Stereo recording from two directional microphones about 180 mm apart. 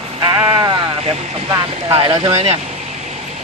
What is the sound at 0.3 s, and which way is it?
Sheep, 20° right (ahead or behind).